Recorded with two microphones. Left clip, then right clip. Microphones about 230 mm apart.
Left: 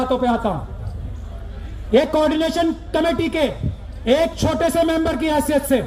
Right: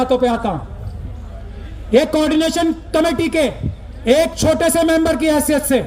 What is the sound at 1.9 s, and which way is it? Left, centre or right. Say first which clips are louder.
A man's voice: right 2 dB; right.